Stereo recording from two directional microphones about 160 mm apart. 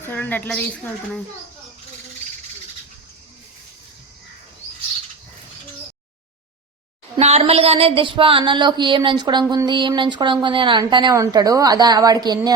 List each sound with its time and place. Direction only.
0.0 s speech: 10° left (ahead or behind)
7.2 s a woman's voice: 40° right (ahead or behind); by 12.5 s 25° right (ahead or behind)